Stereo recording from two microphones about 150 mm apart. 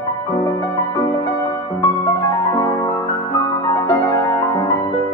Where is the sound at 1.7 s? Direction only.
20° left (ahead or behind).